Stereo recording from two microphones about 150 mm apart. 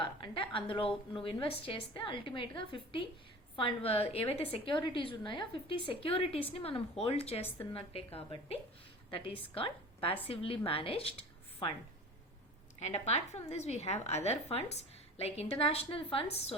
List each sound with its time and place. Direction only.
0.0 s a woman's voice: 35° left (ahead or behind)
12.8 s a woman's voice: 45° left (ahead or behind)